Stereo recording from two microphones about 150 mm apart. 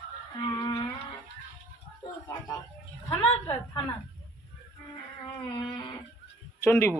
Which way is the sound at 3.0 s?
20° left (ahead or behind).